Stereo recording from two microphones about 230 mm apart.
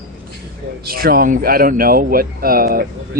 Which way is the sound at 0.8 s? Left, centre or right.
Right.